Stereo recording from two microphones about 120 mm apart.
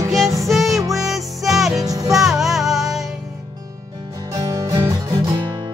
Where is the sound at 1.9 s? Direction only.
30° right (ahead or behind).